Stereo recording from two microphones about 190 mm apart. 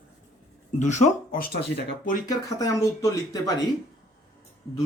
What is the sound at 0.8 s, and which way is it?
Speech, 40° left (ahead or behind).